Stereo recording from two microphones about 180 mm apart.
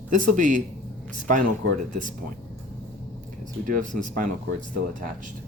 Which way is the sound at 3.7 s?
45° right (ahead or behind).